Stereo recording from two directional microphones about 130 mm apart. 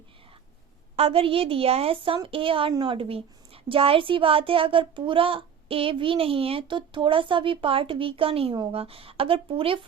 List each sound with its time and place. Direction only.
0.9 s a woman's voice: 50° right (ahead or behind)